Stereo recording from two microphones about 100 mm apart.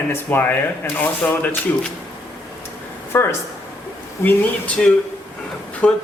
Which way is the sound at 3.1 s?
25° left (ahead or behind).